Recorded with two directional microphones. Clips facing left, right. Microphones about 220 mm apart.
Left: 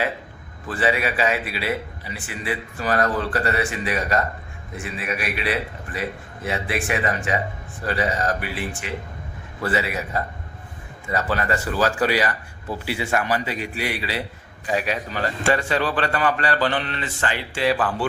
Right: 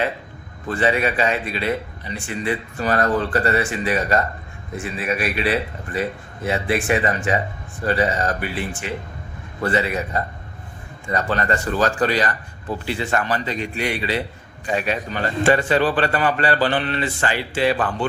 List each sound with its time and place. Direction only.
0.7 s a man's voice: 5° left (ahead or behind)
15.7 s speech: 30° right (ahead or behind)
17.5 s a man's voice: centre (ahead or behind)